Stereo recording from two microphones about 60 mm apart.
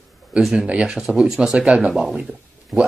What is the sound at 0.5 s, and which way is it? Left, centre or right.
Speech, centre.